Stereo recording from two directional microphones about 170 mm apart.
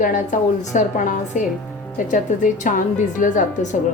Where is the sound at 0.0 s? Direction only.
50° left (ahead or behind).